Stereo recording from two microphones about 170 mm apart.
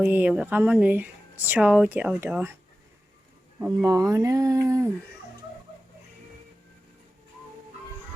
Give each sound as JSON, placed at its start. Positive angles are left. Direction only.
{"t": 0.0, "sound": "speech", "side_deg": -10}
{"t": 3.6, "sound": "speech", "side_deg": -15}